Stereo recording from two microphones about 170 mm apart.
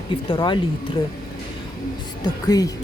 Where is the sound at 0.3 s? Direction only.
25° left (ahead or behind).